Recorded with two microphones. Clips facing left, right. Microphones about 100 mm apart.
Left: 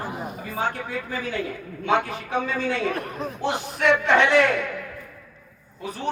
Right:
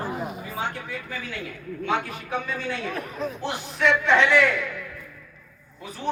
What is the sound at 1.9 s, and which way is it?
Speech, 75° left (ahead or behind).